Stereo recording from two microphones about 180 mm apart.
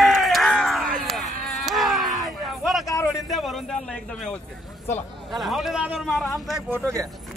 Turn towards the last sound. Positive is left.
turn(degrees=-15)  # may be behind; listen again after turning